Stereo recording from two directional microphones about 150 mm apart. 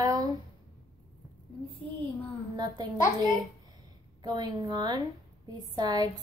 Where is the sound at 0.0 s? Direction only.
25° right (ahead or behind).